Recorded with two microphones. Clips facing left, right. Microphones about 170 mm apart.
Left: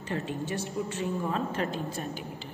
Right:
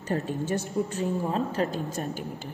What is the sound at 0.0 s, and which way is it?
A woman's voice, 40° right (ahead or behind).